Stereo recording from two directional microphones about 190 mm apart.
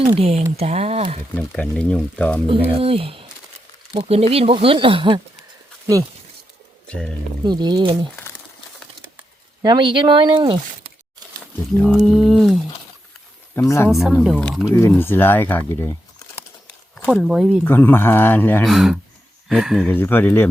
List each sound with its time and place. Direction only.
0.0 s speech: 30° right (ahead or behind)
1.4 s speech: 5° left (ahead or behind)
2.5 s speech: 30° right (ahead or behind)
6.8 s speech: 5° left (ahead or behind)
7.4 s speech: 20° right (ahead or behind)
9.6 s speech: 25° right (ahead or behind)
11.9 s speech: centre (ahead or behind)
13.7 s speech: 15° left (ahead or behind)
13.9 s speech: centre (ahead or behind)
14.8 s speech: 10° left (ahead or behind)
17.2 s speech: 5° right (ahead or behind)
17.6 s speech: 10° left (ahead or behind)
18.7 s speech: centre (ahead or behind)
19.9 s speech: 10° left (ahead or behind)